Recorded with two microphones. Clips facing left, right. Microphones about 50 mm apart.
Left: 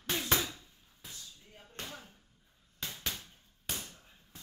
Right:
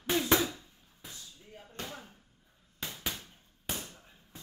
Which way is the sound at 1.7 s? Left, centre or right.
Right.